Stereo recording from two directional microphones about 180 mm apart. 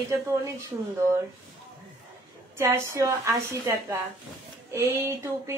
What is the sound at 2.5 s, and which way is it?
Speech, 15° right (ahead or behind).